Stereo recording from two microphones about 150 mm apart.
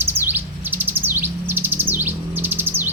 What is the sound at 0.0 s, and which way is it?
Bird, 15° right (ahead or behind).